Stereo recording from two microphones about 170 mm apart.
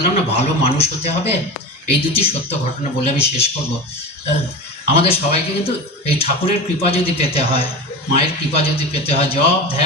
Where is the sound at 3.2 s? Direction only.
35° left (ahead or behind).